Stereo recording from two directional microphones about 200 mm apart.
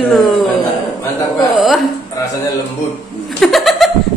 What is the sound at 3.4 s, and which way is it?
Laughter, centre (ahead or behind).